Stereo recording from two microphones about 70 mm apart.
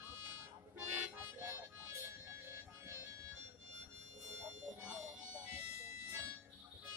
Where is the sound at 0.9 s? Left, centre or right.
Right.